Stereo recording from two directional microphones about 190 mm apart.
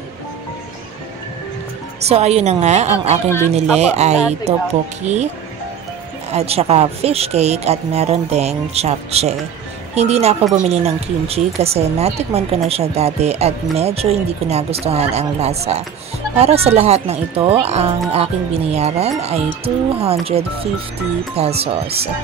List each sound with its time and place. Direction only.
2.0 s speech: 35° right (ahead or behind)
6.3 s speech: 30° right (ahead or behind)